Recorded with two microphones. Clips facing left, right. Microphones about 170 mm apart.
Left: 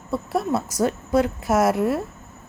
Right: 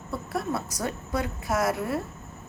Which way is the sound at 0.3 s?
25° left (ahead or behind).